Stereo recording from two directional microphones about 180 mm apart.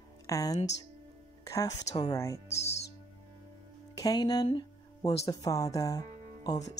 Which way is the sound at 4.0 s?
20° left (ahead or behind).